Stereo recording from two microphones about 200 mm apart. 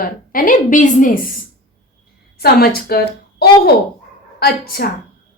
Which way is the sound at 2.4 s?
50° left (ahead or behind).